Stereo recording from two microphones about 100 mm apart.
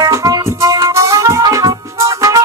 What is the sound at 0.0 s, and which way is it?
Music, 35° right (ahead or behind).